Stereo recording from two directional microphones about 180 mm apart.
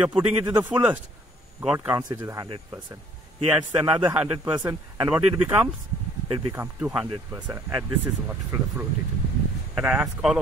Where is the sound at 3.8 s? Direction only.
10° right (ahead or behind).